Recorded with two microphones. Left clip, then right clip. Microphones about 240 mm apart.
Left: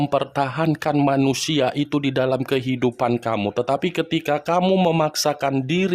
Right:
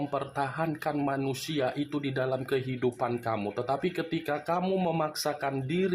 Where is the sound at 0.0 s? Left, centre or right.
Left.